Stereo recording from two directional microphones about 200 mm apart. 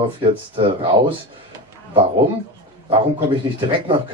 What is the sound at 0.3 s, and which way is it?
Speech, 25° right (ahead or behind).